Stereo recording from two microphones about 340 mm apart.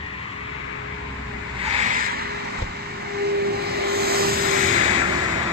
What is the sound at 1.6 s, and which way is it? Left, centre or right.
Music, centre.